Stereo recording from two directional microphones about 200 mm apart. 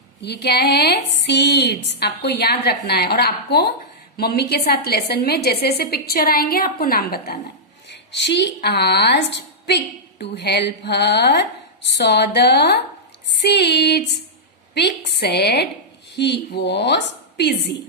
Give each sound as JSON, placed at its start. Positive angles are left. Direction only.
{"t": 0.2, "sound": "a woman's voice", "side_deg": 55}
{"t": 7.9, "sound": "a woman's voice", "side_deg": 60}